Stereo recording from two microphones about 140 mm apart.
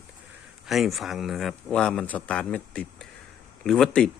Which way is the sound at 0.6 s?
Centre (ahead or behind).